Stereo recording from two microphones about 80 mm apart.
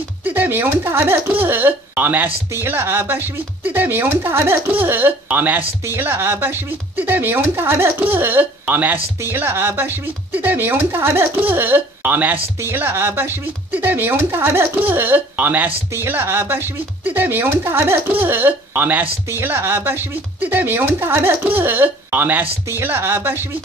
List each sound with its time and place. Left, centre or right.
0.2 s speech: right
15.9 s speech: right